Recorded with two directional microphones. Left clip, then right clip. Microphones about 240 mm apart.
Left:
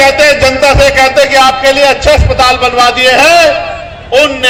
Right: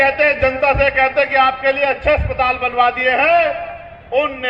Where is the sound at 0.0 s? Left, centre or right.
Right.